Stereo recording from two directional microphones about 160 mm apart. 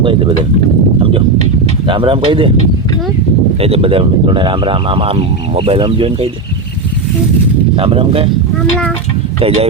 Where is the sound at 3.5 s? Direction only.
35° right (ahead or behind).